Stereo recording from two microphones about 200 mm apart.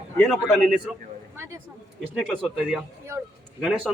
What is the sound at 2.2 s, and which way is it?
A man's voice, 5° left (ahead or behind).